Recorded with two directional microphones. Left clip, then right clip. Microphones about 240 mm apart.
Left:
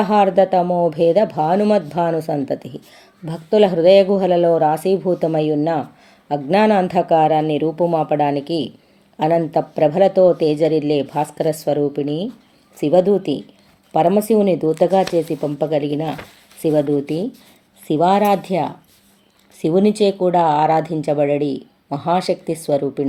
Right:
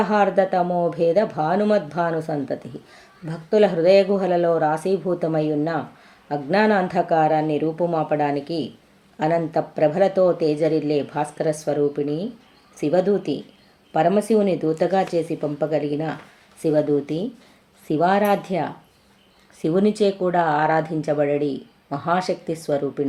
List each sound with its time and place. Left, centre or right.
0.0 s speech: left